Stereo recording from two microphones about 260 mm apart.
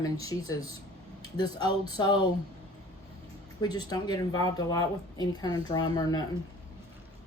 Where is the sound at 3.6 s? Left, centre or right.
Centre.